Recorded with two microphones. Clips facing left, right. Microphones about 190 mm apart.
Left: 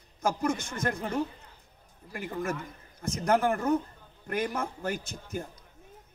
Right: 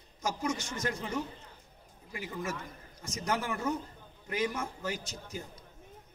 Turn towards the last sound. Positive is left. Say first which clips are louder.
# left 5 dB
turn(degrees=55)  # may be behind; listen again after turning